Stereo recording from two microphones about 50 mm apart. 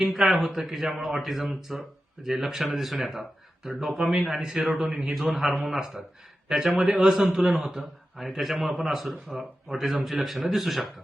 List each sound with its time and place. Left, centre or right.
0.0 s a man's voice: centre
4.9 s a man's voice: centre
5.3 s a man's voice: centre